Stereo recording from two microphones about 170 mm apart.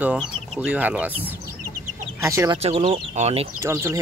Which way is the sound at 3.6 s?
15° right (ahead or behind).